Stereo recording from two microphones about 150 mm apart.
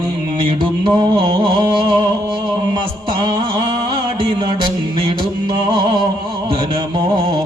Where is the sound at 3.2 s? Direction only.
30° right (ahead or behind).